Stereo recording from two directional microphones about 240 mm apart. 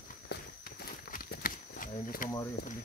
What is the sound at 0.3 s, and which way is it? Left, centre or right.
Walk, left.